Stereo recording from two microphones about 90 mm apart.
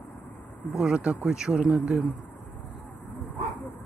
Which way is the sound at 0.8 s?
10° right (ahead or behind).